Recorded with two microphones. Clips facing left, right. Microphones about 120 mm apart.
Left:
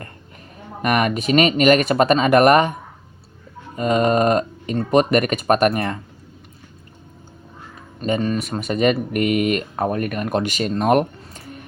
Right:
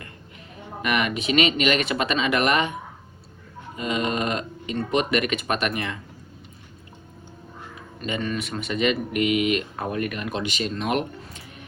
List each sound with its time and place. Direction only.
0.8 s speech: 45° left (ahead or behind)
3.8 s speech: 45° left (ahead or behind)
8.0 s speech: 40° left (ahead or behind)